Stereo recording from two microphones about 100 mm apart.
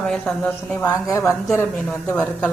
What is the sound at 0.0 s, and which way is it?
Speech, 5° left (ahead or behind).